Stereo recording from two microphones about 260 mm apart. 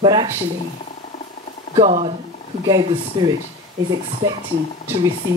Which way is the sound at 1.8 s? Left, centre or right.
Right.